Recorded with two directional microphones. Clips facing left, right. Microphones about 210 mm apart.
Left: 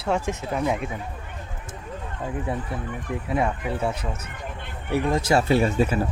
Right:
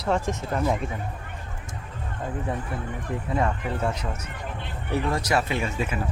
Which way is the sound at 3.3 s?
10° left (ahead or behind).